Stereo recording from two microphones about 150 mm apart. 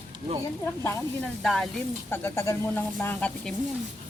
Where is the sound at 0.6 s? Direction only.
15° left (ahead or behind).